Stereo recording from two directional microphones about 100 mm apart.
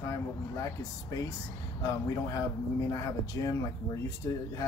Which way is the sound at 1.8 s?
35° left (ahead or behind).